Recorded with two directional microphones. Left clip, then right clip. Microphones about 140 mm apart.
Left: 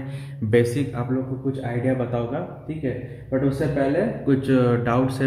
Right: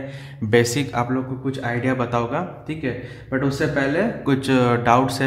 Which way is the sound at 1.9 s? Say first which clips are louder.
Right 4 dB; 35° right (ahead or behind).